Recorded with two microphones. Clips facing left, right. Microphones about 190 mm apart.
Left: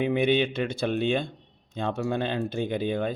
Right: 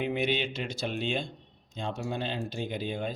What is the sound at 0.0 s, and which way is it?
Speech, 55° left (ahead or behind).